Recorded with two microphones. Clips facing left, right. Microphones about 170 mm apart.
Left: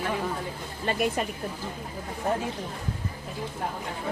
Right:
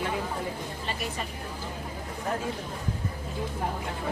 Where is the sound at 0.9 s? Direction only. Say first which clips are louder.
Left 9 dB; 60° left (ahead or behind).